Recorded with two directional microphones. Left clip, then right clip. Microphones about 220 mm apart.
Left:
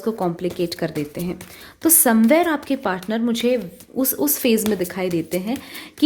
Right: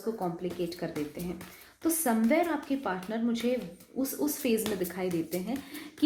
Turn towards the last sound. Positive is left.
turn(degrees=45)  # may be behind; listen again after turning